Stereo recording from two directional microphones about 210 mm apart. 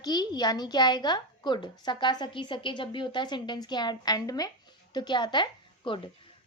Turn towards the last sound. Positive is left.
turn(degrees=20)  # may be behind; listen again after turning